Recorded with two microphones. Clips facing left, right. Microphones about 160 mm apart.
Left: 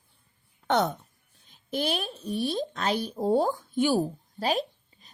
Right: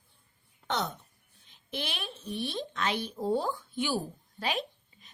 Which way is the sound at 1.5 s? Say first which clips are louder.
Left 9 dB; 40° left (ahead or behind).